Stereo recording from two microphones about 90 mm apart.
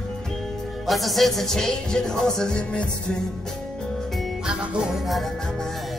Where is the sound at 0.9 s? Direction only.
Centre (ahead or behind).